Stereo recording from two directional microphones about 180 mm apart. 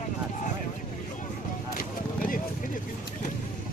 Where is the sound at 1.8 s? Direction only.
50° left (ahead or behind).